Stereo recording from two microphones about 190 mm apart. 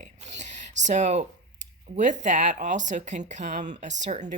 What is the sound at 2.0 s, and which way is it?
Speech, 40° right (ahead or behind).